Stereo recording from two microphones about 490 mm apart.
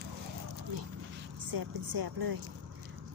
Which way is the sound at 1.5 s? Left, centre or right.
Right.